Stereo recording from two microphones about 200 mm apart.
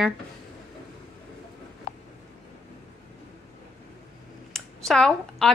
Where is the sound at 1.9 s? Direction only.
45° left (ahead or behind).